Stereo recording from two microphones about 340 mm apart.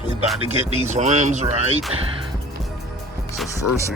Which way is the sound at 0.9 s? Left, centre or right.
Centre.